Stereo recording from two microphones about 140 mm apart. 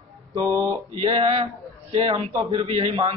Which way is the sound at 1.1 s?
45° right (ahead or behind).